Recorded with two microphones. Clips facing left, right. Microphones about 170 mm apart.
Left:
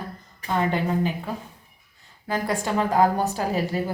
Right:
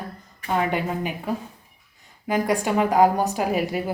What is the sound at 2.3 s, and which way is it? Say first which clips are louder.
Speech: right 3 dB; 10° right (ahead or behind).